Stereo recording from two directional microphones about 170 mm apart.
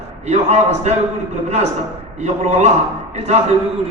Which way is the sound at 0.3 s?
40° right (ahead or behind).